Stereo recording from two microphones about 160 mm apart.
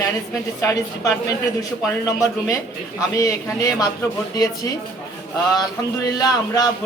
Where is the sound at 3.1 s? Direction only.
20° left (ahead or behind).